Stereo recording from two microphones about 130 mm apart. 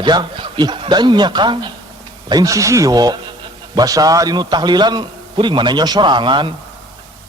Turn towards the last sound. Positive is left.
turn(degrees=-35)  # may be behind; listen again after turning